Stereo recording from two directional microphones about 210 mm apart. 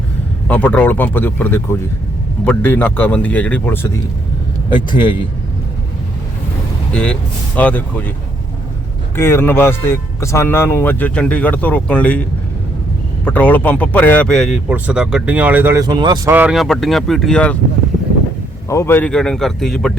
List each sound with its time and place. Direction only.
0.4 s speech: 5° left (ahead or behind)
4.9 s a man's voice: 20° left (ahead or behind)
6.9 s speech: 5° left (ahead or behind)
9.1 s speech: 10° left (ahead or behind)
13.2 s a man's voice: 10° left (ahead or behind); by 16.3 s 20° right (ahead or behind)
16.3 s a man's voice: 5° right (ahead or behind)
18.7 s a man's voice: 10° left (ahead or behind)